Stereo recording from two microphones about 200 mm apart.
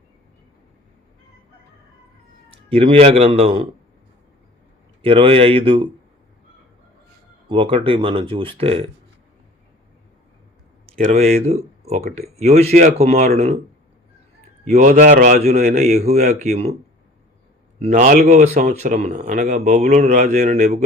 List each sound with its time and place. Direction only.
2.5 s a man's voice: 30° right (ahead or behind)
5.0 s speech: 25° right (ahead or behind)
7.4 s speech: 25° right (ahead or behind)
11.1 s a man's voice: 35° right (ahead or behind)
14.6 s a man's voice: 35° right (ahead or behind)
17.7 s a man's voice: 35° right (ahead or behind)